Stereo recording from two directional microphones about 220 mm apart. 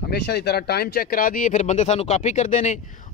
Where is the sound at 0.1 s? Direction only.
50° left (ahead or behind).